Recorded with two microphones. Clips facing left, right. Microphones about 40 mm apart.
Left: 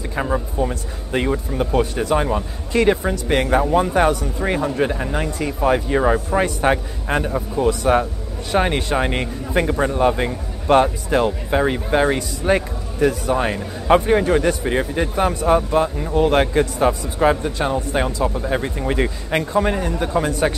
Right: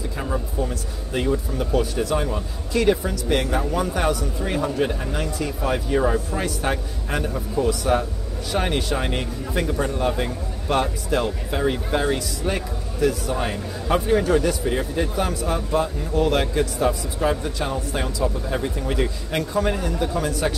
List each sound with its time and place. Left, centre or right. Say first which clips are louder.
0.2 s speech: left 6 dB; left
17.4 s speech: left 5 dB; left